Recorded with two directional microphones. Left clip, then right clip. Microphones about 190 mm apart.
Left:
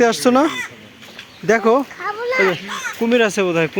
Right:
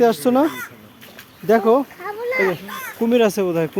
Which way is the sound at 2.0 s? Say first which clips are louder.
Left 3 dB; 35° right (ahead or behind).